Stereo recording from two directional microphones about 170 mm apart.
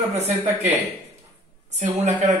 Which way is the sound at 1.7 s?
45° right (ahead or behind).